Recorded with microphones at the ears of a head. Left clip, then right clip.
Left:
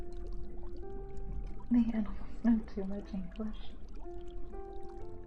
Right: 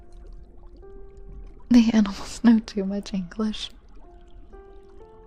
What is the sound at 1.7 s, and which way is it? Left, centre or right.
Speech, right.